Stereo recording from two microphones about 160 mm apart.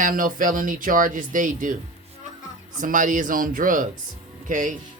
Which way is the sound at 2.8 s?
55° right (ahead or behind).